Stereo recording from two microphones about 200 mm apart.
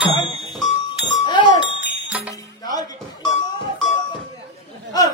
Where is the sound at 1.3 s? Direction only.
25° left (ahead or behind).